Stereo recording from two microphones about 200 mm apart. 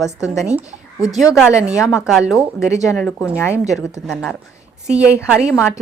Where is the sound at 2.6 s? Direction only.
15° left (ahead or behind).